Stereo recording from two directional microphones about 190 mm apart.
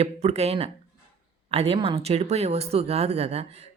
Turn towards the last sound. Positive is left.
turn(degrees=-35)  # may be behind; listen again after turning